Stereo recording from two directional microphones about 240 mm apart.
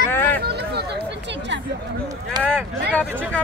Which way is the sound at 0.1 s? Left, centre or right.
Centre.